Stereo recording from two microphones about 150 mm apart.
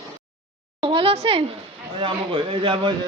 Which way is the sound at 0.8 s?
35° right (ahead or behind).